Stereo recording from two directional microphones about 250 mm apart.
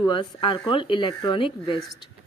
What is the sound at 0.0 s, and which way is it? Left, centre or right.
Speech, centre.